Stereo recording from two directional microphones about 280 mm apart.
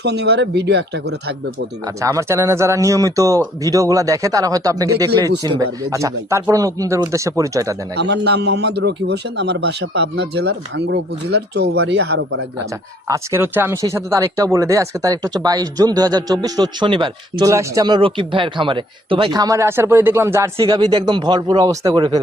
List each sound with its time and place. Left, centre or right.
0.0 s a man's voice: right
2.0 s speech: centre
7.9 s a man's voice: right
13.1 s speech: centre